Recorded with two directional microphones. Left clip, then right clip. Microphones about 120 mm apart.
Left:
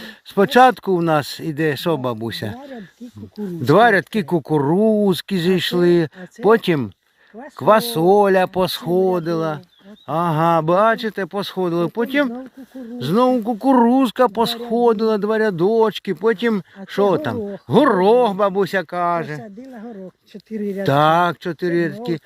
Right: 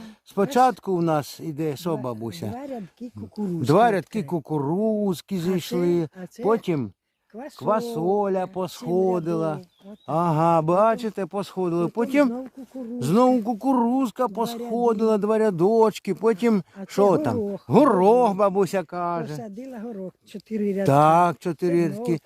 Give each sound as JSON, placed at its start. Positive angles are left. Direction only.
{"t": 0.3, "sound": "speech", "side_deg": 15}
{"t": 3.6, "sound": "speech", "side_deg": 5}
{"t": 7.6, "sound": "speech", "side_deg": 30}
{"t": 8.9, "sound": "speech", "side_deg": 5}
{"t": 13.0, "sound": "speech", "side_deg": -10}
{"t": 13.4, "sound": "speech", "side_deg": 0}
{"t": 13.7, "sound": "speech", "side_deg": 20}
{"t": 18.9, "sound": "speech", "side_deg": 10}
{"t": 20.3, "sound": "speech", "side_deg": -15}